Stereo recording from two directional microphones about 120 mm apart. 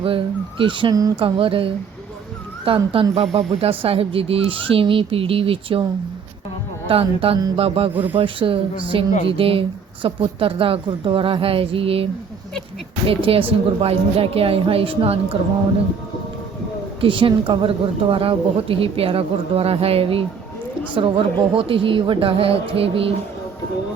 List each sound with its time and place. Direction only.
0.6 s a woman's voice: 45° right (ahead or behind)
6.8 s a woman's voice: 50° right (ahead or behind)
13.1 s a woman's voice: 50° right (ahead or behind)
17.0 s a woman's voice: 45° right (ahead or behind)